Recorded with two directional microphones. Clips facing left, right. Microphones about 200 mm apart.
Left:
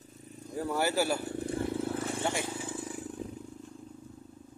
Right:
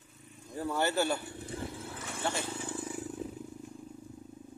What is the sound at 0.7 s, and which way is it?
Speech, 10° left (ahead or behind).